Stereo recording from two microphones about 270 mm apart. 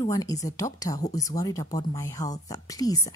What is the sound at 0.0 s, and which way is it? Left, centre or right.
Speech, centre.